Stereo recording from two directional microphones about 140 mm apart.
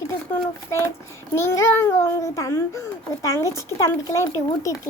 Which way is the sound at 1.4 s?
20° left (ahead or behind).